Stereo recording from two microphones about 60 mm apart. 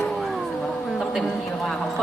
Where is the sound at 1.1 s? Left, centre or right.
Centre.